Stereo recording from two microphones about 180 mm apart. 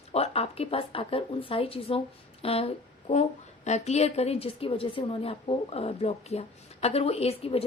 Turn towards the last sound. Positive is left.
turn(degrees=35)  # may be behind; listen again after turning